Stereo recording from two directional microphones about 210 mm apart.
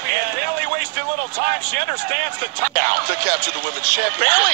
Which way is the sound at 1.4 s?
45° right (ahead or behind).